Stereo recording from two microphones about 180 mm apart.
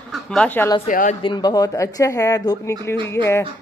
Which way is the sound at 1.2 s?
25° left (ahead or behind).